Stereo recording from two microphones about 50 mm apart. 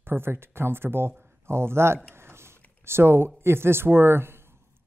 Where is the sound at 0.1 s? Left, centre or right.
Right.